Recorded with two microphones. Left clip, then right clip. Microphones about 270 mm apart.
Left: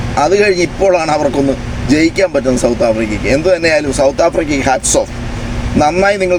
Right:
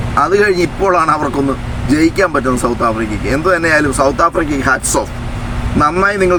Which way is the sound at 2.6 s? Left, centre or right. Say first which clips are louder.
Left 3 dB; centre.